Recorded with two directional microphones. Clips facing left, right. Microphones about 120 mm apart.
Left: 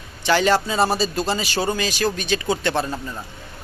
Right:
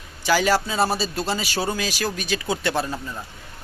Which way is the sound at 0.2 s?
5° right (ahead or behind).